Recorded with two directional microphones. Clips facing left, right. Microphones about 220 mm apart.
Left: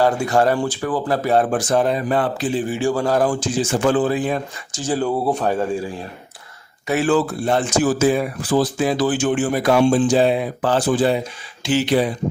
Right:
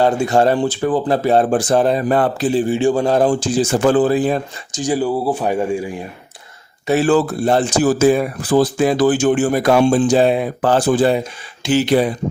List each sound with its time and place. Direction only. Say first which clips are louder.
0.0 s speech: right 3 dB; 25° right (ahead or behind)
3.5 s speech: right 3 dB; 40° right (ahead or behind)
4.7 s speech: right 3 dB; 15° right (ahead or behind)
6.8 s speech: right 3 dB; 35° right (ahead or behind)